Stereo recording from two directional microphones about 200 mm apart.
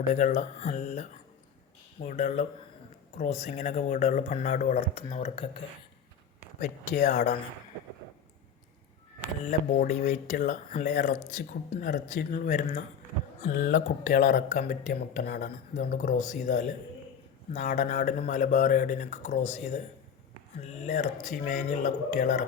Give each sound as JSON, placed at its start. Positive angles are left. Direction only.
{"t": 0.1, "sound": "speech", "side_deg": 35}
{"t": 6.6, "sound": "speech", "side_deg": 35}
{"t": 9.5, "sound": "speech", "side_deg": 40}
{"t": 15.7, "sound": "speech", "side_deg": 40}